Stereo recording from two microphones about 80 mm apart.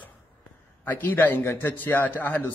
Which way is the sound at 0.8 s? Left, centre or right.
Left.